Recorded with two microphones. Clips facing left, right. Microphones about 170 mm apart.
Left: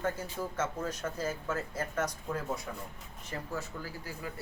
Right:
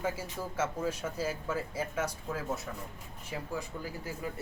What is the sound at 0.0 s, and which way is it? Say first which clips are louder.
Speech: left 1 dB; 10° right (ahead or behind).